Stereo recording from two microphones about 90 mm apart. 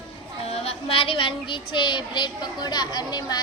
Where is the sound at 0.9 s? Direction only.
90° left.